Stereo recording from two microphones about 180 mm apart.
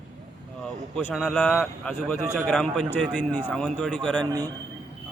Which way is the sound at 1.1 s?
Centre (ahead or behind).